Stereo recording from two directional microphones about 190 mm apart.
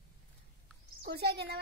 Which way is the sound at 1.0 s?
55° right (ahead or behind).